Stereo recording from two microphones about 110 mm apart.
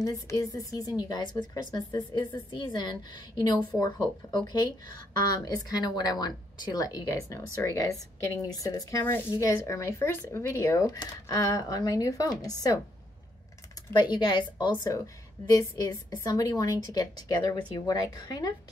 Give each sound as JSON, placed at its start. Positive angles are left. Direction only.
{"t": 0.0, "sound": "speech", "side_deg": 30}
{"t": 13.9, "sound": "a woman's voice", "side_deg": 40}
{"t": 15.5, "sound": "speech", "side_deg": 30}